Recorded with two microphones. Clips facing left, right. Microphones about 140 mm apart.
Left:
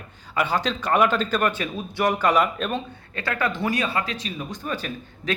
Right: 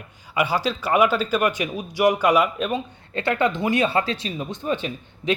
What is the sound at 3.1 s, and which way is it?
Speech, 25° right (ahead or behind).